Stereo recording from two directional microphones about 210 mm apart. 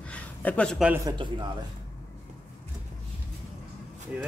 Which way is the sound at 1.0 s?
20° right (ahead or behind).